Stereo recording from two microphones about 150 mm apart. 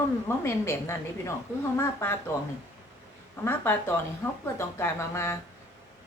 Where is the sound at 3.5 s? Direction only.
15° left (ahead or behind).